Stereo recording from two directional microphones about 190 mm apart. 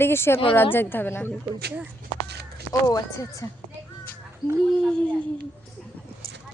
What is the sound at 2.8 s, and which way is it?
Speech, 15° left (ahead or behind).